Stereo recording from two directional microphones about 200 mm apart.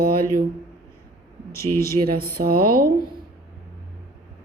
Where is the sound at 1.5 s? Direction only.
15° left (ahead or behind).